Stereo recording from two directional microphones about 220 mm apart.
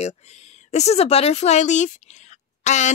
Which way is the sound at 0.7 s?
30° left (ahead or behind).